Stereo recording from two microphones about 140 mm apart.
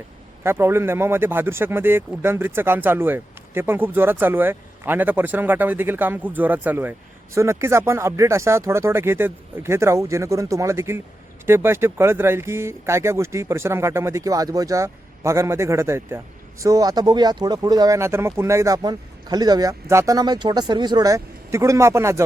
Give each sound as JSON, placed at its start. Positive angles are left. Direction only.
{"t": 0.4, "sound": "speech", "side_deg": -15}